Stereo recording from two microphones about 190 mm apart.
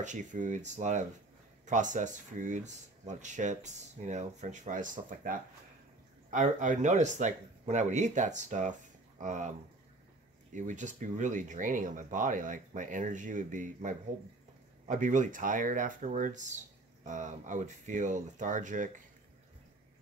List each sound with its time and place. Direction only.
0.0 s speech: 40° right (ahead or behind)
10.5 s speech: 40° right (ahead or behind)